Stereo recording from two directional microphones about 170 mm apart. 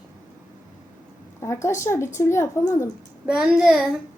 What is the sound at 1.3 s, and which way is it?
A woman's voice, 15° left (ahead or behind).